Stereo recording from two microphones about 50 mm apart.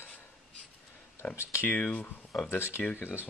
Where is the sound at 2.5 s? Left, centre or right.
Left.